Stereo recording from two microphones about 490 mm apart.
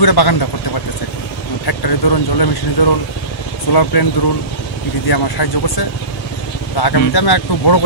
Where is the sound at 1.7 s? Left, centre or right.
Left.